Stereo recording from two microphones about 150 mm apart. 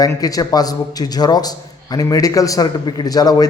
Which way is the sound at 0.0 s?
25° left (ahead or behind).